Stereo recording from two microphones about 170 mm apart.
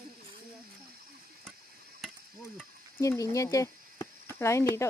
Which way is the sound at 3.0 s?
15° left (ahead or behind).